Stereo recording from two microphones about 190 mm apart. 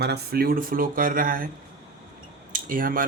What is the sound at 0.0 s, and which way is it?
Speech, 55° right (ahead or behind).